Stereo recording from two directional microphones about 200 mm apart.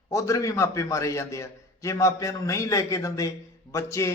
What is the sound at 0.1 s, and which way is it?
A man's voice, 15° left (ahead or behind).